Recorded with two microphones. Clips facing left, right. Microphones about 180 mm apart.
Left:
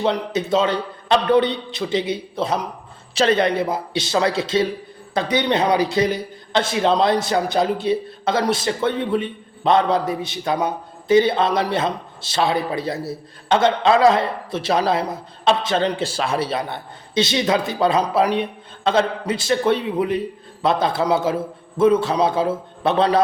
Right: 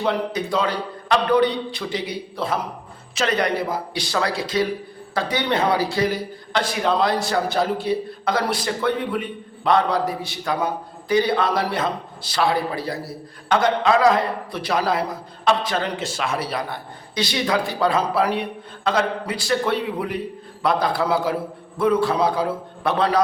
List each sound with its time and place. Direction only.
0.0 s a man's voice: 25° left (ahead or behind)